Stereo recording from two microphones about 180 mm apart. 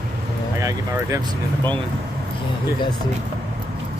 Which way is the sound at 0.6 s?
20° right (ahead or behind).